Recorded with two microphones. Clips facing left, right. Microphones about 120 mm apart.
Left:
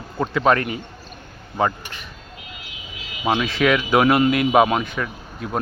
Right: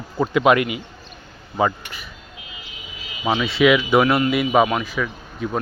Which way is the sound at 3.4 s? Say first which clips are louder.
Right 3 dB; 5° right (ahead or behind).